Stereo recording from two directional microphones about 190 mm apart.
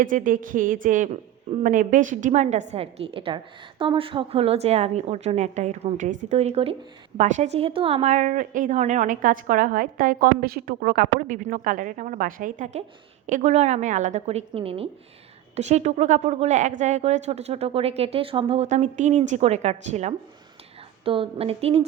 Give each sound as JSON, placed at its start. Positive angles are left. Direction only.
{"t": 0.0, "sound": "a woman's voice", "side_deg": -45}